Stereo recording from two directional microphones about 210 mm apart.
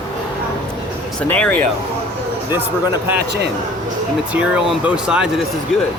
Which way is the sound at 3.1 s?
50° right (ahead or behind).